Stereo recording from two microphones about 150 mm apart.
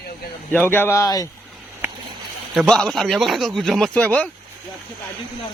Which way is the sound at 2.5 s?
Centre (ahead or behind).